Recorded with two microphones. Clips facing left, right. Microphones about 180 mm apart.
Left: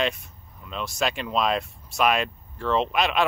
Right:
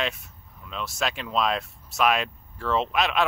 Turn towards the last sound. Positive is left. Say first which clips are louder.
# left 1 dB
turn(degrees=0)  # may be behind; listen again after turning